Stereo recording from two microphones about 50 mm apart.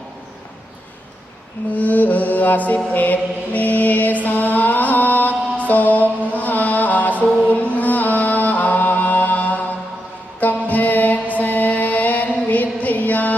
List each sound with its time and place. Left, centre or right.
1.7 s music: left
7.4 s chant: left
10.4 s music: left